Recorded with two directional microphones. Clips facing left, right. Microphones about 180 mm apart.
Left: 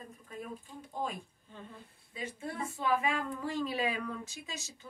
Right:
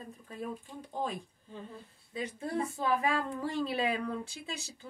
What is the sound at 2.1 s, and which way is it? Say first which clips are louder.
A woman's voice: right 5 dB; 35° right (ahead or behind).